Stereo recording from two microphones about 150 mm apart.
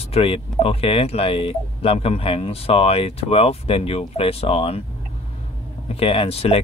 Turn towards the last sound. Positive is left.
turn(degrees=40)  # may be behind; listen again after turning